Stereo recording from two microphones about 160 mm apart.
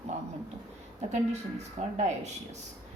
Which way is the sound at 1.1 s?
45° right (ahead or behind).